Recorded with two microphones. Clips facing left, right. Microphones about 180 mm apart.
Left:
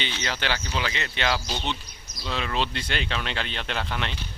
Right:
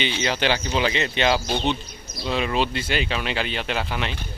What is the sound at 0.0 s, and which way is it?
Speech, 15° right (ahead or behind).